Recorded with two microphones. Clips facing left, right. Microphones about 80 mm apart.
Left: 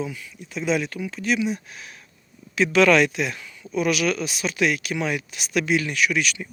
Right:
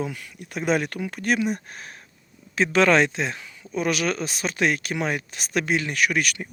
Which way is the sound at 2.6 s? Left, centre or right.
Right.